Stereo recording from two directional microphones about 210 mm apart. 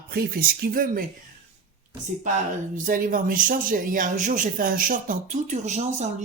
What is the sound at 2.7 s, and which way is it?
Speech, 40° right (ahead or behind).